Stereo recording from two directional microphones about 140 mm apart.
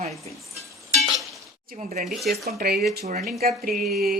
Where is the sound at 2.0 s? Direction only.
Centre (ahead or behind).